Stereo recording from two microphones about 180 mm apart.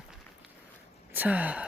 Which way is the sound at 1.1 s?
10° right (ahead or behind).